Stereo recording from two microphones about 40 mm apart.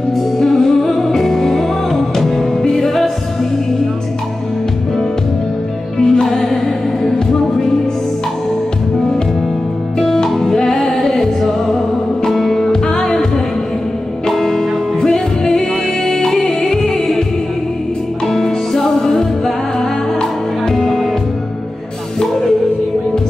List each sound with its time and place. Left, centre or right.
0.4 s music: centre
5.9 s music: centre
9.9 s music: centre
14.3 s music: centre
18.2 s music: centre
20.7 s music: centre